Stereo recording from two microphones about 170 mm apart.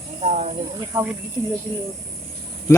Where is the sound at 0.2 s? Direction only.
40° right (ahead or behind).